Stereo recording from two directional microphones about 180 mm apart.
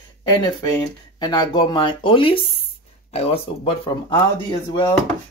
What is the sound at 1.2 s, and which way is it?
Speech, 25° left (ahead or behind).